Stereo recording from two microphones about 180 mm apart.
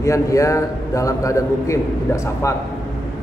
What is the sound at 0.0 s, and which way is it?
A man's voice, 15° left (ahead or behind).